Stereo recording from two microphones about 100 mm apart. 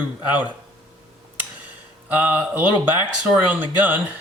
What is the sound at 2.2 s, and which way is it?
Speech, 15° right (ahead or behind).